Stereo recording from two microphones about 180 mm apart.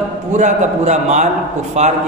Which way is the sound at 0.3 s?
40° right (ahead or behind).